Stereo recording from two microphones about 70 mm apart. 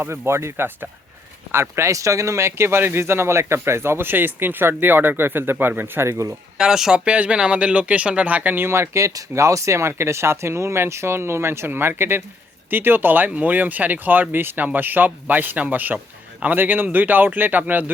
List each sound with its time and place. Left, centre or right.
0.0 s speech: right
6.6 s speech: centre; by 17.9 s right